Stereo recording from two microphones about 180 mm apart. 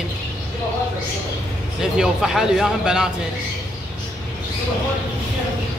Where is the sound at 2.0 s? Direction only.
Centre (ahead or behind).